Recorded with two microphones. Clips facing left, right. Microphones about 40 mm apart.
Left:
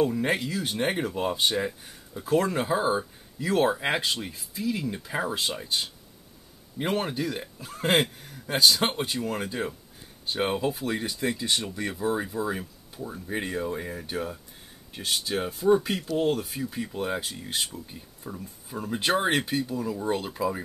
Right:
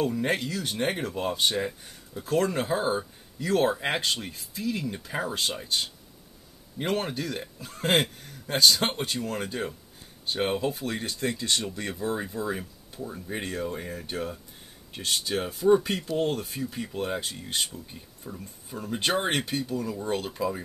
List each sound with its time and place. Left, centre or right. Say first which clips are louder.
0.1 s speech: left 1 dB; centre
18.9 s speech: left 2 dB; centre